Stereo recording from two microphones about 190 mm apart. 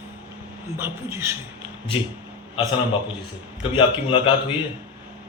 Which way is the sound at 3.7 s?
25° left (ahead or behind).